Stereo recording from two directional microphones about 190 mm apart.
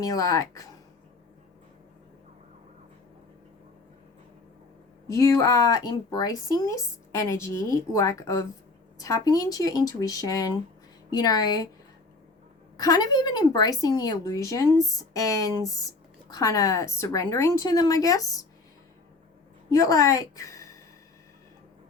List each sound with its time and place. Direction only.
0.0 s speech: 20° left (ahead or behind)
5.0 s a woman's voice: 15° left (ahead or behind)
12.7 s a woman's voice: 20° left (ahead or behind)
19.7 s a woman's voice: 15° left (ahead or behind)